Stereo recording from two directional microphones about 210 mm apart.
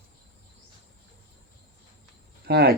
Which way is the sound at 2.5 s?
50° right (ahead or behind).